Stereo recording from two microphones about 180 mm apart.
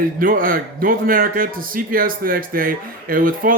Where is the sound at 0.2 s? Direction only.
50° right (ahead or behind).